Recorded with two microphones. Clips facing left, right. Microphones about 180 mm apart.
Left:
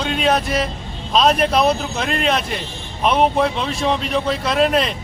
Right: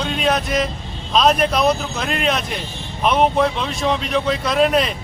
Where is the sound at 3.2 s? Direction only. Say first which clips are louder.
Right 1 dB; centre (ahead or behind).